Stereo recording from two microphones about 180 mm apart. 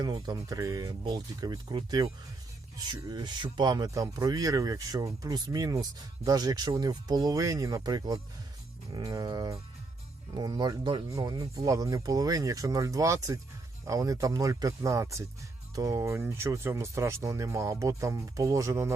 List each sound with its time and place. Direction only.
0.0 s speech: 20° right (ahead or behind)